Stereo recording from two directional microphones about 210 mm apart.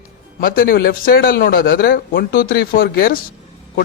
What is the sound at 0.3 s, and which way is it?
A man's voice, 45° left (ahead or behind).